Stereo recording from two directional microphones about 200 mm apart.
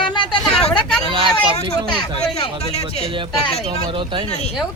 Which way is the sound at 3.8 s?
25° right (ahead or behind).